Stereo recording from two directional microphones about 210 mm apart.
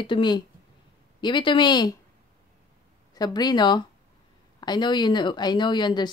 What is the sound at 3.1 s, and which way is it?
Speech, 20° left (ahead or behind).